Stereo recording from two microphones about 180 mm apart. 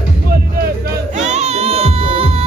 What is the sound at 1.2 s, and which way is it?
Music, 40° right (ahead or behind).